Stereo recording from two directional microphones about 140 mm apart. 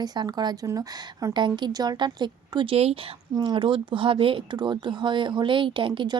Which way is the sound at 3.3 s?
35° right (ahead or behind).